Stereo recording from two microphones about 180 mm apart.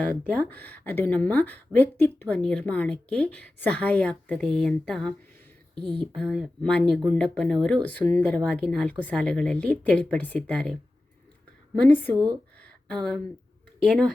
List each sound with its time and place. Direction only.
0.3 s a woman's voice: 10° left (ahead or behind)
6.1 s a woman's voice: centre (ahead or behind)
12.1 s speech: 20° right (ahead or behind)
12.5 s a sound: 5° left (ahead or behind)
13.8 s speech: centre (ahead or behind)